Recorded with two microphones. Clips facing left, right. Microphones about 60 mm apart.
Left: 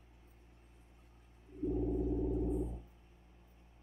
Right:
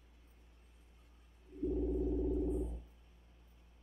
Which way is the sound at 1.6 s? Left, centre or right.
Centre.